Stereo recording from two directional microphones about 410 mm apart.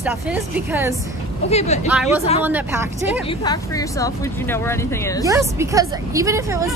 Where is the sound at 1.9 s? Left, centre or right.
Centre.